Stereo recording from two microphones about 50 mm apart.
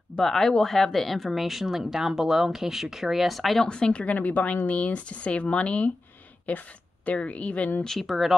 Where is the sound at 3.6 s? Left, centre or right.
Centre.